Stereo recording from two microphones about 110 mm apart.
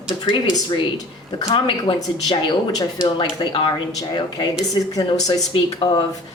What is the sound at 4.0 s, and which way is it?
Speech, 40° left (ahead or behind).